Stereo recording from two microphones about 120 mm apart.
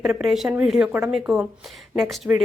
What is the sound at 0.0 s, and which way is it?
A woman's voice, 5° right (ahead or behind).